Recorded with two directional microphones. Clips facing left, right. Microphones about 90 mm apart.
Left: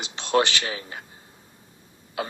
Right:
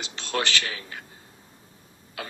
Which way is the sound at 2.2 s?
25° left (ahead or behind).